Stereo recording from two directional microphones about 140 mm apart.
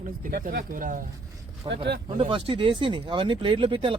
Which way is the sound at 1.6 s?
40° right (ahead or behind).